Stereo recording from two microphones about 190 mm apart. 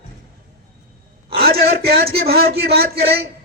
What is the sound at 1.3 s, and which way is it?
A man's voice, 55° right (ahead or behind).